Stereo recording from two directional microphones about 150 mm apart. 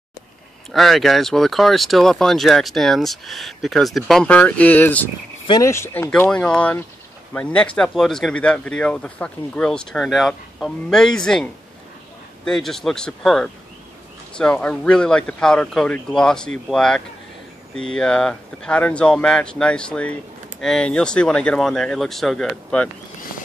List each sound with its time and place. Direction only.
0.7 s speech: centre (ahead or behind)